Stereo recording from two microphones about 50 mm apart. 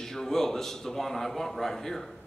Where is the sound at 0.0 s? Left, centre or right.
Centre.